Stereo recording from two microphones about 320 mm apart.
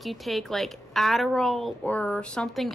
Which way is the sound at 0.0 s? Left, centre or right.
Centre.